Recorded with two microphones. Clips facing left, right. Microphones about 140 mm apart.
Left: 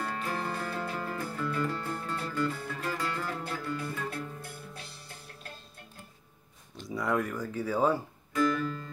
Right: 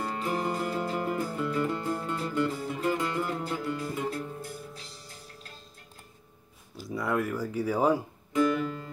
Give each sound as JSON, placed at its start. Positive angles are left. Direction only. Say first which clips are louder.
{"t": 0.0, "sound": "music", "louder": "right 4 dB", "side_deg": -20}
{"t": 4.4, "sound": "music", "louder": "right 4 dB", "side_deg": 60}
{"t": 6.8, "sound": "music", "louder": "right 1 dB", "side_deg": 0}